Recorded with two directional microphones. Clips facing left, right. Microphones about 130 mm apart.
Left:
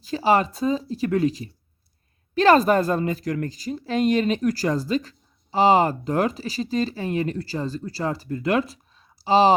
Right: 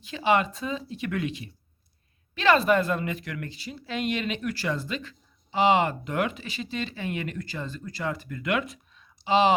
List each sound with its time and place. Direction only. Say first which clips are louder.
0.0 s a woman's voice: left 4 dB; 35° left (ahead or behind)